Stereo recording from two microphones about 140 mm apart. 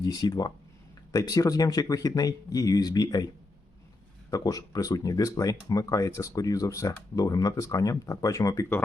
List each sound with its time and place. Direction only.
0.0 s speech: 30° left (ahead or behind)
4.3 s speech: 25° left (ahead or behind)